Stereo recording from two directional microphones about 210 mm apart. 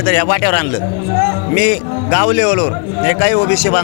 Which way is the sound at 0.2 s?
25° left (ahead or behind).